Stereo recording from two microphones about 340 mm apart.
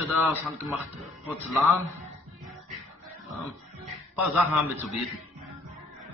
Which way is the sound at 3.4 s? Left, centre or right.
Centre.